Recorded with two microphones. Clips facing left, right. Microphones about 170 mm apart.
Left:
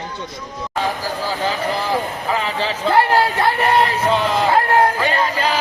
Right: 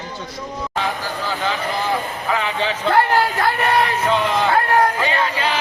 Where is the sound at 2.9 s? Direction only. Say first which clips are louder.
Left 2 dB; 25° left (ahead or behind).